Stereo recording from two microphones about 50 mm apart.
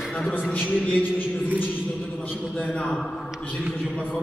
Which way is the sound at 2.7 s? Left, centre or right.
Centre.